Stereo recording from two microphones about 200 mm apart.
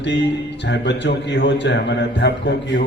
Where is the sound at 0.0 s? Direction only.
60° left (ahead or behind).